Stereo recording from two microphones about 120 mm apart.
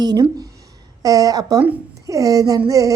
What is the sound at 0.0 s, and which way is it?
A woman's voice, 35° right (ahead or behind).